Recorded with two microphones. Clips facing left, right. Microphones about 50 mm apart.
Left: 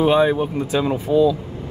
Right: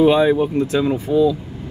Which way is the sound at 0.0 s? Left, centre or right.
Centre.